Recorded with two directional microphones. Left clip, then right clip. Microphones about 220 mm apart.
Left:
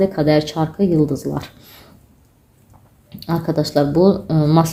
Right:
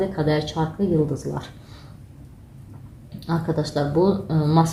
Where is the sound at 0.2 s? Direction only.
50° left (ahead or behind).